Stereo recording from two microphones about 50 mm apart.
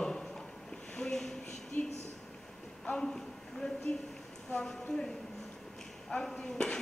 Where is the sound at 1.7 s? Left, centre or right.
Left.